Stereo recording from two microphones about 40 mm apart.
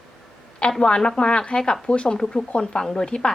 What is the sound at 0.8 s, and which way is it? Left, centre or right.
A woman's voice, left.